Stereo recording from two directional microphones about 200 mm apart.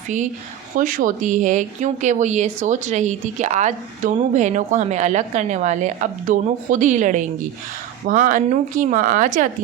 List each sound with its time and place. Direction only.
0.8 s speech: 40° right (ahead or behind)